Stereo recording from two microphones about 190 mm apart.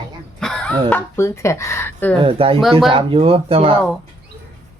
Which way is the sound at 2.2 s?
30° right (ahead or behind).